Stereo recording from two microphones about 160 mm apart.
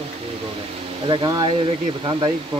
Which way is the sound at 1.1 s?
25° right (ahead or behind).